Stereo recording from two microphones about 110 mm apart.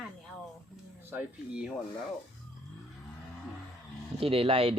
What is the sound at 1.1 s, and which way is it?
Speech, 10° right (ahead or behind).